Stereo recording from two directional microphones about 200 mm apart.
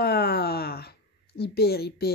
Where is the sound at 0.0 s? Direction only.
50° left (ahead or behind).